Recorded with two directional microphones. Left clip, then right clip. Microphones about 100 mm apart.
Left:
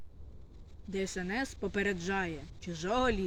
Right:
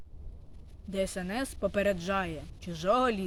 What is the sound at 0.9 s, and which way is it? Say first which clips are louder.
Speech: right 3 dB; 40° right (ahead or behind).